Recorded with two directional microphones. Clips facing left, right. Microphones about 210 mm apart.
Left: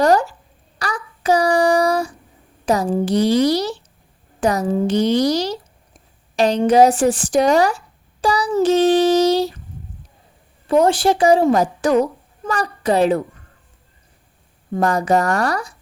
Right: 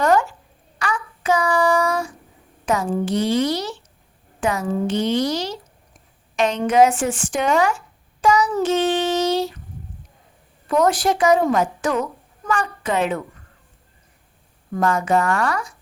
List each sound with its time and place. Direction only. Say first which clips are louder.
0.0 s a woman's voice: left 3 dB; 35° left (ahead or behind)
0.8 s child singing: right 1 dB; 35° left (ahead or behind)
2.6 s a woman's voice: left 3 dB; 35° left (ahead or behind)
8.2 s child singing: left 1 dB; 35° left (ahead or behind)
10.7 s a woman's voice: left 3 dB; 30° left (ahead or behind)
14.7 s a woman's voice: left 2 dB; 35° left (ahead or behind)